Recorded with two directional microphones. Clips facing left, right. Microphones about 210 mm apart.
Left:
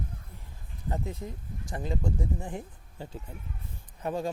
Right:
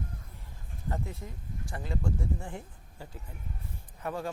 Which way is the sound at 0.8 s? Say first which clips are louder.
Left 3 dB; 20° left (ahead or behind).